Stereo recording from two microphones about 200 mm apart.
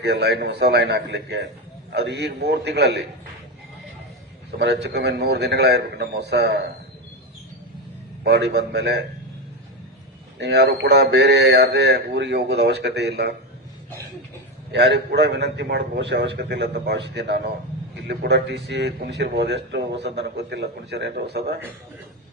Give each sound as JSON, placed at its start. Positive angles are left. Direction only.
{"t": 0.0, "sound": "a man's voice", "side_deg": -60}
{"t": 4.5, "sound": "a man's voice", "side_deg": -55}
{"t": 8.2, "sound": "a man's voice", "side_deg": -55}
{"t": 10.3, "sound": "a man's voice", "side_deg": -55}
{"t": 14.7, "sound": "a man's voice", "side_deg": -55}